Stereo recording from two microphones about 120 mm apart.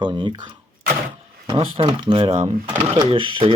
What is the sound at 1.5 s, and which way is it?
Speech, 50° right (ahead or behind).